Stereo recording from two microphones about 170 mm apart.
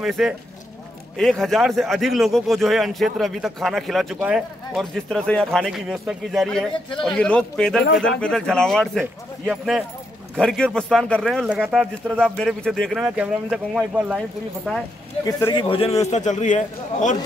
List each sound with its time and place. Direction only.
0.0 s speech: centre (ahead or behind)
11.4 s speech: 5° right (ahead or behind)
13.0 s speech: 5° right (ahead or behind)
15.2 s speech: 25° left (ahead or behind)
16.1 s a man's voice: 45° left (ahead or behind)